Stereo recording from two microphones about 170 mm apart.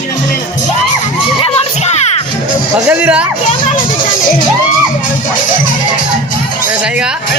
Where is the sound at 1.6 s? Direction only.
40° left (ahead or behind).